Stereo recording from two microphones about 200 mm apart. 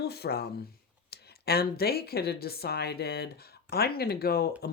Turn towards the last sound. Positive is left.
turn(degrees=50)  # may be behind; listen again after turning